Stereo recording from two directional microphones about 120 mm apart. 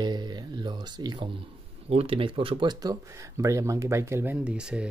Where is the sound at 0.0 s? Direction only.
35° right (ahead or behind).